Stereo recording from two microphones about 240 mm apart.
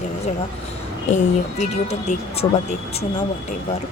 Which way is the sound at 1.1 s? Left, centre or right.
Left.